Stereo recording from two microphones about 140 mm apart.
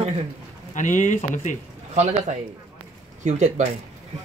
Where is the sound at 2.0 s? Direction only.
55° right (ahead or behind).